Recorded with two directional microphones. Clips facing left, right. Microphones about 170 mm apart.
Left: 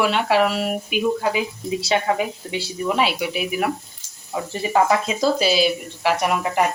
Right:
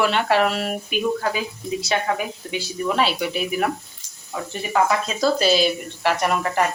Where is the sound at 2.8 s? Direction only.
10° left (ahead or behind).